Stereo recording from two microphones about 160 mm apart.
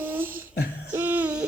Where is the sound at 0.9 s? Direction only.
10° right (ahead or behind).